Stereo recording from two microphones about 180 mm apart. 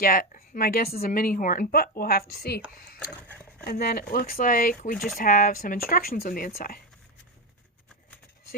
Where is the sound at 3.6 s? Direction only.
60° left (ahead or behind).